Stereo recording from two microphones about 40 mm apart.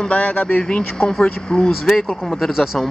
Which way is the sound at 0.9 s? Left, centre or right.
Centre.